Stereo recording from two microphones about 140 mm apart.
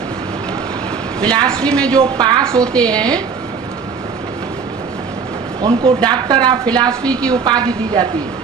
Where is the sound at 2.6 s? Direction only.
5° left (ahead or behind).